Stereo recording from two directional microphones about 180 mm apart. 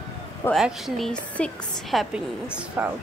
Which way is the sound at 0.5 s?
Centre (ahead or behind).